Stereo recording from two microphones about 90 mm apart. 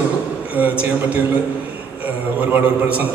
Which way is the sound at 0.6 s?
15° right (ahead or behind).